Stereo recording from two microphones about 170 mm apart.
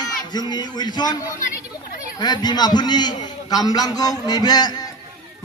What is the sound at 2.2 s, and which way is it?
Speech, 25° left (ahead or behind).